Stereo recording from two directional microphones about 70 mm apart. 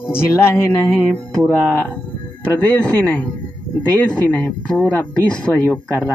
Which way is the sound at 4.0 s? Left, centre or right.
Centre.